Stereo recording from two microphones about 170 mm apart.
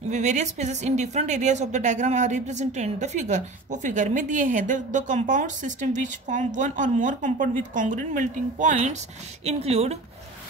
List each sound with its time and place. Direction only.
0.1 s a woman's voice: 45° right (ahead or behind)